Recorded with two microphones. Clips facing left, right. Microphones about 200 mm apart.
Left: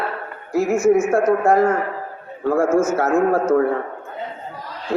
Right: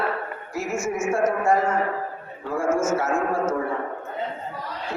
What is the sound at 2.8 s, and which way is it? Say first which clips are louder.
Speech: left 6 dB; 60° left (ahead or behind).